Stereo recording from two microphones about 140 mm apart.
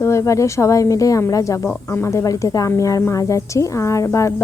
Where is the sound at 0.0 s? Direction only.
20° left (ahead or behind).